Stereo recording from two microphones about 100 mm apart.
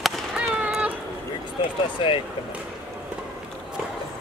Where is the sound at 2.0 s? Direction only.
60° left (ahead or behind).